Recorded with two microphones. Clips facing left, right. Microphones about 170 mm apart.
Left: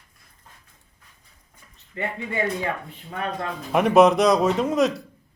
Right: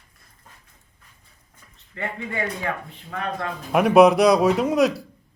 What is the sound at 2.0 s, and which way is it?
Speech, 20° left (ahead or behind).